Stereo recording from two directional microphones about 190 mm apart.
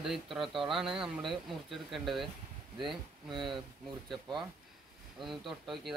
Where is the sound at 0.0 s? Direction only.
Centre (ahead or behind).